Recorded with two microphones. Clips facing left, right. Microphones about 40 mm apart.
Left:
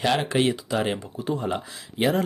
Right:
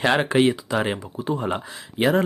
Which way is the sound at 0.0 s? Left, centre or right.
Right.